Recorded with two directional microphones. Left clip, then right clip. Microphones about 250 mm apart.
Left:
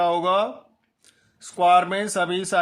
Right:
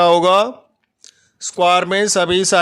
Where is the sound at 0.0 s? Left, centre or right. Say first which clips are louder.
Right 8 dB; right.